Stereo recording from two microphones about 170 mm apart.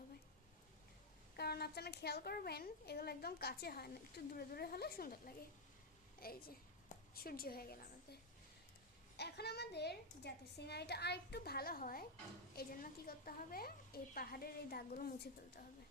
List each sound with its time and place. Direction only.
1.4 s a woman's voice: 70° left (ahead or behind)
6.8 s a sound: 60° left (ahead or behind)
9.1 s a woman's voice: 75° left (ahead or behind)